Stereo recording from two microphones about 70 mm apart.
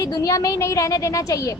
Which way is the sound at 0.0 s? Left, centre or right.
Left.